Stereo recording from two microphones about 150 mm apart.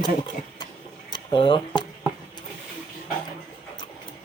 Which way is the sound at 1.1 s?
35° left (ahead or behind).